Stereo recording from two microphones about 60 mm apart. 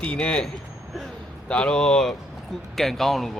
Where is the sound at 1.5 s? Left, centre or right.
Centre.